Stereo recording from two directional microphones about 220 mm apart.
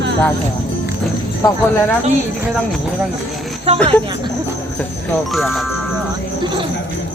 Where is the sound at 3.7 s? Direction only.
25° right (ahead or behind).